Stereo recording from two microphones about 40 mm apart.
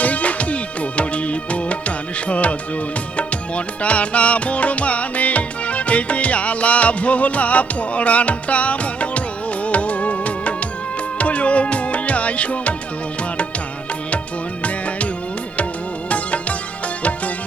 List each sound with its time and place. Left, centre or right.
0.0 s music: left
2.2 s speech: left
3.2 s music: left
16.0 s music: left